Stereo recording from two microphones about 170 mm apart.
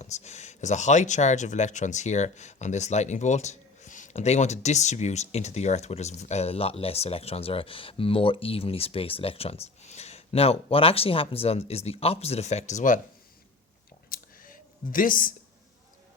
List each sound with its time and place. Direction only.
0.0 s speech: 40° left (ahead or behind)
14.1 s computer keyboard: 55° left (ahead or behind)